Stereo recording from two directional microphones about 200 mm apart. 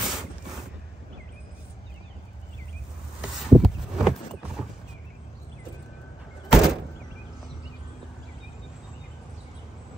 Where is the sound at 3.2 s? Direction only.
5° right (ahead or behind).